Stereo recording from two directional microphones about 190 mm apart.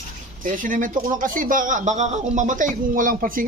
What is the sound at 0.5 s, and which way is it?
Speech, 45° right (ahead or behind).